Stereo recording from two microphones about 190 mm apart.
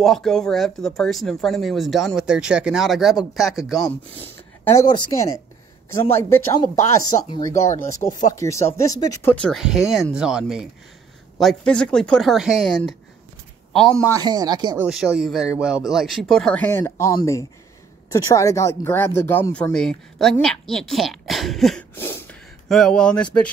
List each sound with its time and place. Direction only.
0.0 s speech: centre (ahead or behind)
4.6 s speech: 20° left (ahead or behind)
6.0 s speech: 10° left (ahead or behind)
14.0 s speech: 20° right (ahead or behind)
14.8 s speech: centre (ahead or behind)
21.9 s a sound: 10° left (ahead or behind)
22.7 s speech: centre (ahead or behind)